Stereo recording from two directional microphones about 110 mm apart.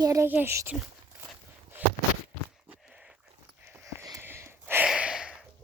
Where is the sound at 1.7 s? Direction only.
20° right (ahead or behind).